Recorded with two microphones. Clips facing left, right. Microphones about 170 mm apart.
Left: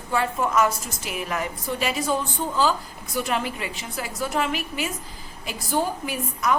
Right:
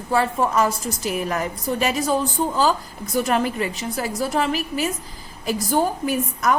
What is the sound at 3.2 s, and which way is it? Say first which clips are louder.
A woman's voice: right 6 dB; 45° right (ahead or behind).